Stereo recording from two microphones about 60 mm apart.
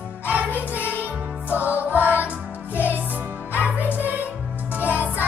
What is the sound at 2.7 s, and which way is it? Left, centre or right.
Music, left.